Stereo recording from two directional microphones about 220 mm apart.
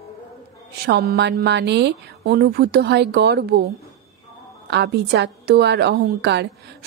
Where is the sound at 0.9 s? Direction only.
50° right (ahead or behind).